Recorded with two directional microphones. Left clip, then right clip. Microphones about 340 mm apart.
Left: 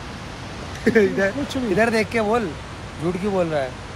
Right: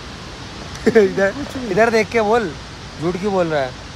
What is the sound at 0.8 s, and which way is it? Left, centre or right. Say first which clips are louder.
Speech: right 4 dB; centre.